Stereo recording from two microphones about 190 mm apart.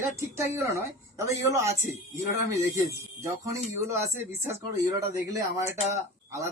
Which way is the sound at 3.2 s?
15° right (ahead or behind).